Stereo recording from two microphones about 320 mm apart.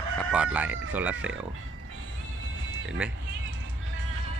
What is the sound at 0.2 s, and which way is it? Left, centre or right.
Speech, centre.